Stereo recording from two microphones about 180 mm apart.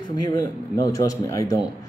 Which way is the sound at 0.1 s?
20° left (ahead or behind).